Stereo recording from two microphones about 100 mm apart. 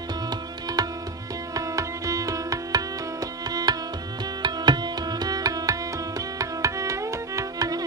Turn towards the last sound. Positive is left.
turn(degrees=-35)  # may be behind; listen again after turning